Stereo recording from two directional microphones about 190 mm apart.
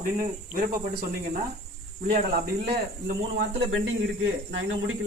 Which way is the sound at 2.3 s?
55° right (ahead or behind).